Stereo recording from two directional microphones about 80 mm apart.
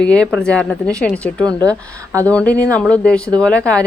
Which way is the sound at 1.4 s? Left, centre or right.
Right.